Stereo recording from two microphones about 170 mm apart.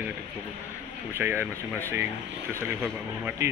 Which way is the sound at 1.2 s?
15° right (ahead or behind).